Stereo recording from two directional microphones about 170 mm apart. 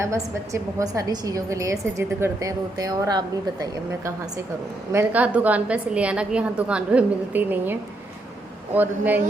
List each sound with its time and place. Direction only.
0.0 s a woman's voice: 15° right (ahead or behind)
4.9 s a woman's voice: 10° right (ahead or behind)